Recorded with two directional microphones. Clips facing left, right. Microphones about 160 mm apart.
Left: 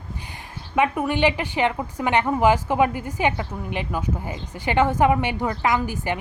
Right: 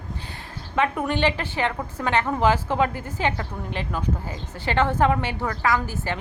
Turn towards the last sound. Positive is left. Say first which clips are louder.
# left 1 dB
turn(degrees=15)  # may be behind; listen again after turning